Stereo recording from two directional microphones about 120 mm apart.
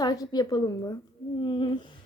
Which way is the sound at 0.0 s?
35° left (ahead or behind).